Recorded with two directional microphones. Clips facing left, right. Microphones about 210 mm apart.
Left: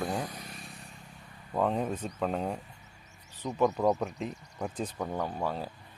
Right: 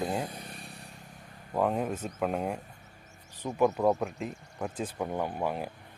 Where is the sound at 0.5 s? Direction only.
60° right (ahead or behind).